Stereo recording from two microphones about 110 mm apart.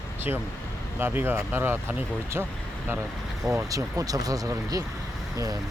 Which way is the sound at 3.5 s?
30° right (ahead or behind).